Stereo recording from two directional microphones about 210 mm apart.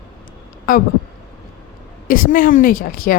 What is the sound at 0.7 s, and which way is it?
Speech, 40° left (ahead or behind).